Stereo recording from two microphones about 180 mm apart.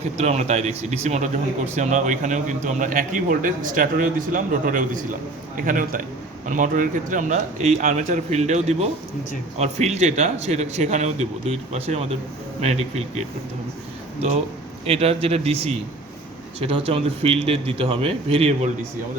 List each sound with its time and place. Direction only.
0.2 s speech: 40° right (ahead or behind)
14.8 s speech: 35° right (ahead or behind)